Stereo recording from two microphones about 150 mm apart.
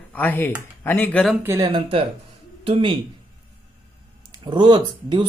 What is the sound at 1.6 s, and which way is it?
Speech, 35° right (ahead or behind).